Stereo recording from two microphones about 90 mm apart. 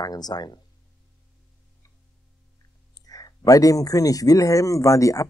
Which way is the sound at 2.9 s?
45° left (ahead or behind).